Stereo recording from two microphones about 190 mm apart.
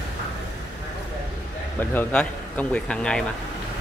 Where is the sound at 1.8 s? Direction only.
10° left (ahead or behind).